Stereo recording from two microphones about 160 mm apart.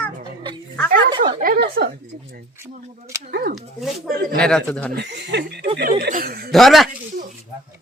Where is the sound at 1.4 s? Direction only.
70° right (ahead or behind).